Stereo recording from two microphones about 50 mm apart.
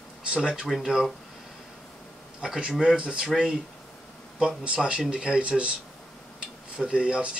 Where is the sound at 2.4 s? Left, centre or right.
Centre.